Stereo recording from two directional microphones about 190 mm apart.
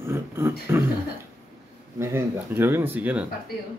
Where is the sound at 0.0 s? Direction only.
15° right (ahead or behind).